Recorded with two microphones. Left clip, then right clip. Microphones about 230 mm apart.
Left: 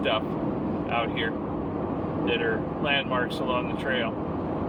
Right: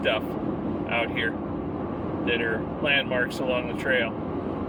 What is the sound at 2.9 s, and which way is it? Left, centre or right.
Speech, right.